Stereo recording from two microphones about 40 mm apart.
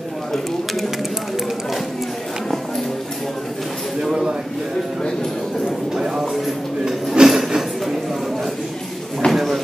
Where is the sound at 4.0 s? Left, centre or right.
Centre.